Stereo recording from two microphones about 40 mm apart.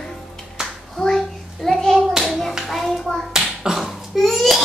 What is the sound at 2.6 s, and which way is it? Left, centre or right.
Hands, centre.